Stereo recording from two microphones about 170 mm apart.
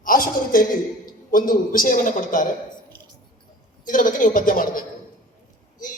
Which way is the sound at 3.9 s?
50° left (ahead or behind).